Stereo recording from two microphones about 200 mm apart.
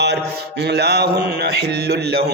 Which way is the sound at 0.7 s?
55° right (ahead or behind).